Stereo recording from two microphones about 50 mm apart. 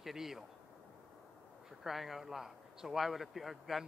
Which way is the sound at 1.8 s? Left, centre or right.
Centre.